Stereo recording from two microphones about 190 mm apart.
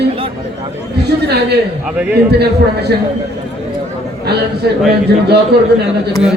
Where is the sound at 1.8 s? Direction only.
5° right (ahead or behind).